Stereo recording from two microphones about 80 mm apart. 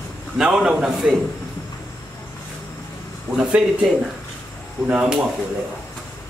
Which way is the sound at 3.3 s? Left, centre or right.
Centre.